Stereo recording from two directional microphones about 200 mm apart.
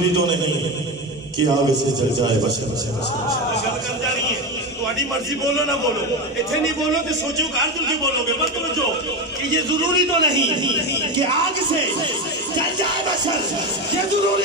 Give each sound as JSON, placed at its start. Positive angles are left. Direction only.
{"t": 9.5, "sound": "a man's voice", "side_deg": -20}